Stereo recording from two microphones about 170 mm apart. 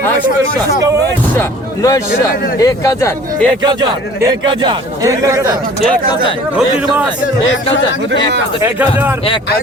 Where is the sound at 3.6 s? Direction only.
25° right (ahead or behind).